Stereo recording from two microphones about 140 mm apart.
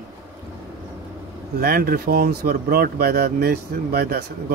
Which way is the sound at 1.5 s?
90° right.